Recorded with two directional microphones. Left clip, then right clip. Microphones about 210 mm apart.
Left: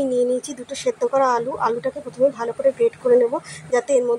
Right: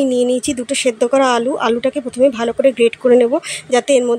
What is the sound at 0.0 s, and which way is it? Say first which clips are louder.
Speech: right 5 dB; 50° right (ahead or behind).